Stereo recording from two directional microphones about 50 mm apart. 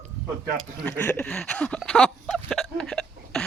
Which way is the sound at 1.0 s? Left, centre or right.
Left.